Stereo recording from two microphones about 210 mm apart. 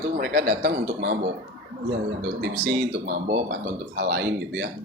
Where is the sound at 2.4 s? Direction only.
50° right (ahead or behind).